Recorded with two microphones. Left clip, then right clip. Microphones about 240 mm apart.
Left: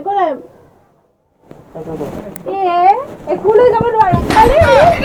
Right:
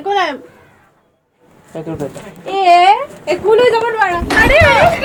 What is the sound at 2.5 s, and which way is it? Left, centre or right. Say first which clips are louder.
Speech: right 5 dB; right.